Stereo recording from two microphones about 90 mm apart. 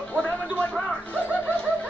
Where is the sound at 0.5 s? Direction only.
15° left (ahead or behind).